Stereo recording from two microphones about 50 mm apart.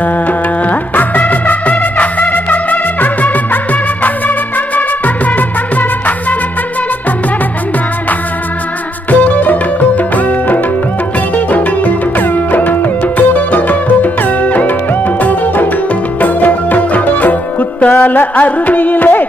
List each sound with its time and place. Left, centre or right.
0.0 s music: left
4.7 s music: left
9.1 s music: left